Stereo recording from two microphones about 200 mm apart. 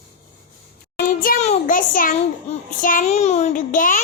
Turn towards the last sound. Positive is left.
turn(degrees=40)  # may be behind; listen again after turning